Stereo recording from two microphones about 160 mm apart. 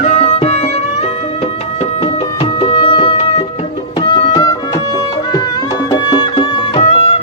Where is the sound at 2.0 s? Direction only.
35° left (ahead or behind).